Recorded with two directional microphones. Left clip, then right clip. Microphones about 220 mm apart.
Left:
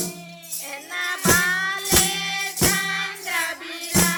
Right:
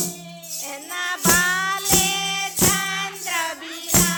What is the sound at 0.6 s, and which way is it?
Music, 20° right (ahead or behind).